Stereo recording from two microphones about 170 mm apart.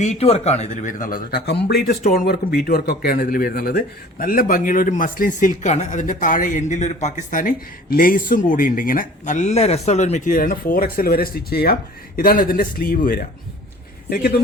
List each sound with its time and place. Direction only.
0.0 s speech: 40° left (ahead or behind); by 14.4 s 65° left (ahead or behind)